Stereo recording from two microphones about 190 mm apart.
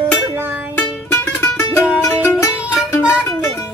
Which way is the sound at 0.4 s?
10° right (ahead or behind).